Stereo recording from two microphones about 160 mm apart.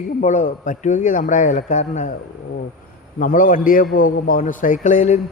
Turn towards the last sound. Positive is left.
turn(degrees=50)  # may be behind; listen again after turning